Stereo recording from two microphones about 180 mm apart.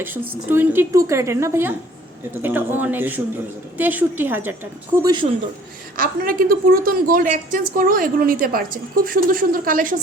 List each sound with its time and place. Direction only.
0.0 s a woman's voice: 10° right (ahead or behind)
6.0 s a woman's voice: 55° right (ahead or behind)